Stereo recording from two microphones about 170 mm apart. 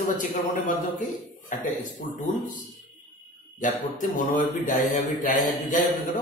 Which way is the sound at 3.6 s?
50° left (ahead or behind).